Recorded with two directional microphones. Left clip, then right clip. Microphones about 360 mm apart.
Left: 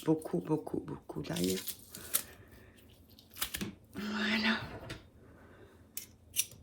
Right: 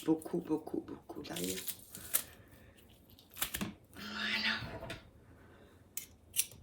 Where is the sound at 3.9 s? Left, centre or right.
Centre.